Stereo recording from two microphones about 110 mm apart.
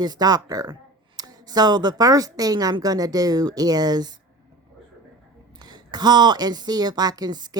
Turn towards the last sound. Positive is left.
turn(degrees=-40)  # may be behind; listen again after turning